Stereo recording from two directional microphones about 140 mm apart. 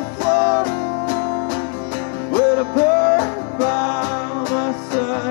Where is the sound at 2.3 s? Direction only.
15° left (ahead or behind).